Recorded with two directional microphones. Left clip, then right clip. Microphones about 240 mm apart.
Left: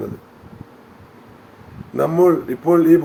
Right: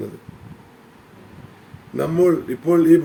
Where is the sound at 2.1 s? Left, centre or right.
Centre.